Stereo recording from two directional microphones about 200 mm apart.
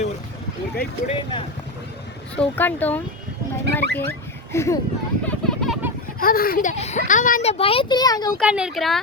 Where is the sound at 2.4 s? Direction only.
10° left (ahead or behind).